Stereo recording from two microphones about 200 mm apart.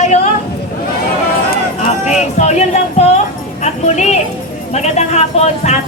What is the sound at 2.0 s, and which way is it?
Speech, 35° left (ahead or behind).